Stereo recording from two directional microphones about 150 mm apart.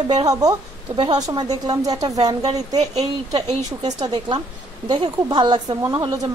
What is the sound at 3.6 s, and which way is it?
A woman's voice, 25° right (ahead or behind).